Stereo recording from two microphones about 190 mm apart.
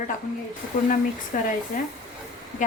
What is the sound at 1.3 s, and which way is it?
Speech, 45° left (ahead or behind).